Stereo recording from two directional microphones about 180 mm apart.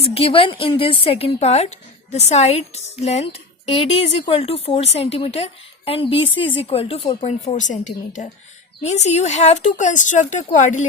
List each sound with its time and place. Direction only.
0.0 s a woman's voice: 35° left (ahead or behind)